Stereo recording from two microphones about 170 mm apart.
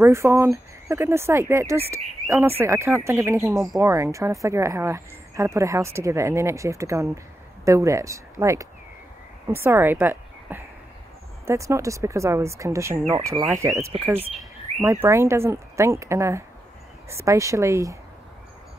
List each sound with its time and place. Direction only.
0.0 s a woman's voice: 15° right (ahead or behind)